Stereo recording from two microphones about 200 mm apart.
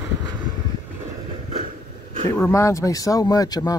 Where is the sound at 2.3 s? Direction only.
15° left (ahead or behind).